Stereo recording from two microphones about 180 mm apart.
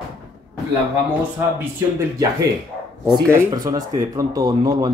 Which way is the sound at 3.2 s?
20° right (ahead or behind).